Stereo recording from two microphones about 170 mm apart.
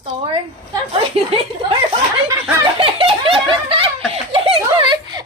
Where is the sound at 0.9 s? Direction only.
30° right (ahead or behind).